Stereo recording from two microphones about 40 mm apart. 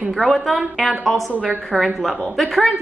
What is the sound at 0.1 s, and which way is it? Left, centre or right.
A woman's voice, centre.